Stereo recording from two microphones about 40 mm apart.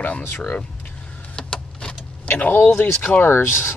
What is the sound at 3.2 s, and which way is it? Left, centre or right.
Speech, left.